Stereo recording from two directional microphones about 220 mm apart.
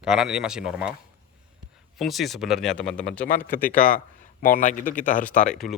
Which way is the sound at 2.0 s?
Centre (ahead or behind).